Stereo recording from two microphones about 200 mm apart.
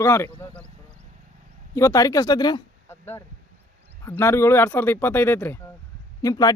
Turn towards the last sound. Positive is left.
turn(degrees=20)  # may be behind; listen again after turning